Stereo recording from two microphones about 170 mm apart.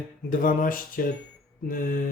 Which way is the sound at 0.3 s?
50° left (ahead or behind).